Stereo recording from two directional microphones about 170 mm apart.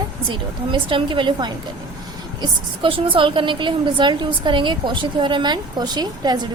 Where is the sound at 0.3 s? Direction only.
30° right (ahead or behind).